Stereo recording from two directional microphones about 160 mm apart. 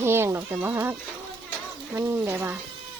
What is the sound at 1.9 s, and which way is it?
Speech, 15° right (ahead or behind).